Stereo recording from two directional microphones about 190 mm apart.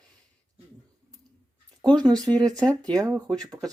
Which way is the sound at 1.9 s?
20° right (ahead or behind).